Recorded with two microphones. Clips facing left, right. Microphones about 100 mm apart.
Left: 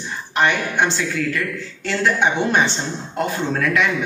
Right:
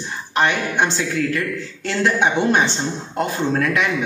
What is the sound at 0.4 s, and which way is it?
A man's voice, 20° right (ahead or behind).